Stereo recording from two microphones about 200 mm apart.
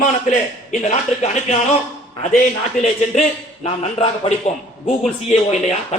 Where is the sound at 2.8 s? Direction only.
35° left (ahead or behind).